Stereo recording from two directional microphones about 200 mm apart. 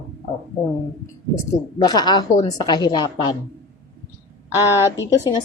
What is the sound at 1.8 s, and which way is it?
A woman's voice, 20° left (ahead or behind).